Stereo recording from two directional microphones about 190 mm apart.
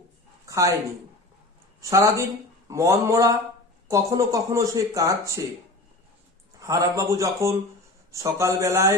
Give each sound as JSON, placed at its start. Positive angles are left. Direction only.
{"t": 0.4, "sound": "a sound", "side_deg": -15}
{"t": 1.8, "sound": "speech", "side_deg": -15}
{"t": 6.6, "sound": "speech", "side_deg": -15}